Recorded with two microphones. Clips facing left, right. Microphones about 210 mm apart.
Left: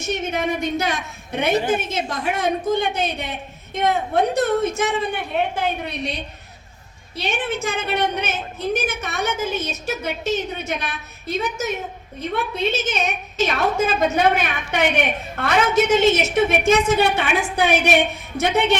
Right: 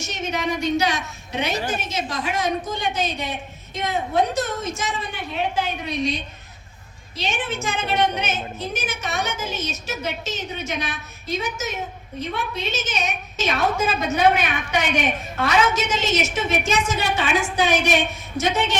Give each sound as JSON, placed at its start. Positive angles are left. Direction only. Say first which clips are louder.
{"t": 0.0, "sound": "a woman's voice", "louder": "left 3 dB", "side_deg": 55}